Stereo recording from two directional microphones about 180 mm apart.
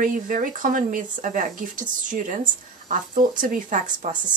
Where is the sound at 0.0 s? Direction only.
45° right (ahead or behind).